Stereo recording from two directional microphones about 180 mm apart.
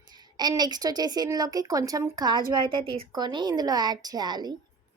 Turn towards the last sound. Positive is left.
turn(degrees=-25)  # may be behind; listen again after turning